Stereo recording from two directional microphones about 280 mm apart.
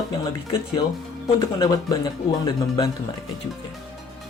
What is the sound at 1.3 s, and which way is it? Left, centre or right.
Speech, centre.